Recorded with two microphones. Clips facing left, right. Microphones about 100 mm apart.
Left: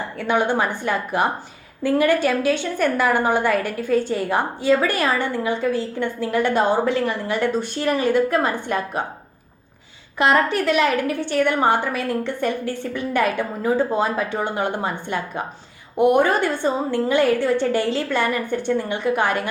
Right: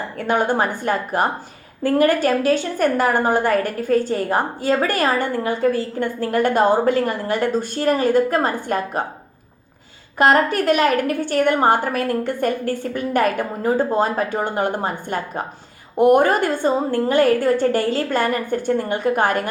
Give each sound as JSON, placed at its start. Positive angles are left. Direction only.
{"t": 0.2, "sound": "a woman's voice", "side_deg": -45}
{"t": 10.2, "sound": "a woman's voice", "side_deg": -45}